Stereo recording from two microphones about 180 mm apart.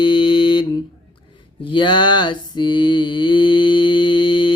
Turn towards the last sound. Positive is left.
turn(degrees=30)  # may be behind; listen again after turning